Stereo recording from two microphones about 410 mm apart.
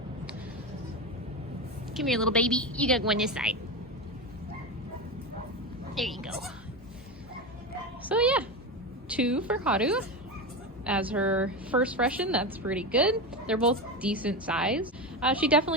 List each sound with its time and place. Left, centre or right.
1.9 s a woman's voice: centre
5.9 s a woman's voice: centre
8.0 s a woman's voice: centre